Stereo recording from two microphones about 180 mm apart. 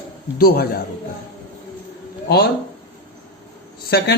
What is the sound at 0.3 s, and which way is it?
Speech, 55° left (ahead or behind).